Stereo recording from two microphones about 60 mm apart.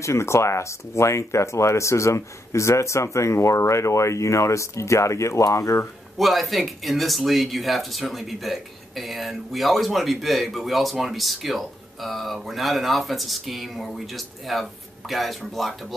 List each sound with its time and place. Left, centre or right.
0.0 s speech: left
6.1 s speech: centre